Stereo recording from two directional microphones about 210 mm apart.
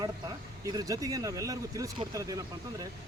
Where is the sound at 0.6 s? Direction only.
15° right (ahead or behind).